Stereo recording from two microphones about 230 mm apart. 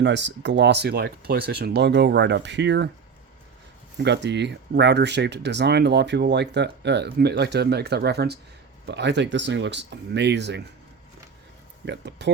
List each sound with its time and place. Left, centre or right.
0.0 s speech: right
3.9 s speech: right
11.9 s speech: right